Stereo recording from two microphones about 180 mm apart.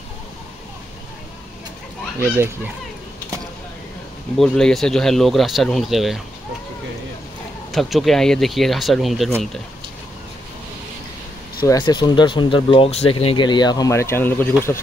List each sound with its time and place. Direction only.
2.3 s speech: 15° right (ahead or behind)
4.4 s speech: centre (ahead or behind)
7.7 s speech: centre (ahead or behind)
11.6 s speech: 20° left (ahead or behind)